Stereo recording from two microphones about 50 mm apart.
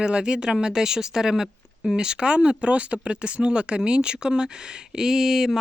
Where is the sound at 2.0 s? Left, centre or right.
Centre.